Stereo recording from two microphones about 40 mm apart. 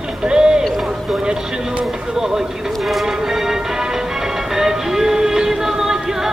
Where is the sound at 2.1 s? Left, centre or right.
Centre.